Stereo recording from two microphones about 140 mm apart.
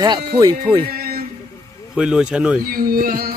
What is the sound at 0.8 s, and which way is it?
Music, 90° right.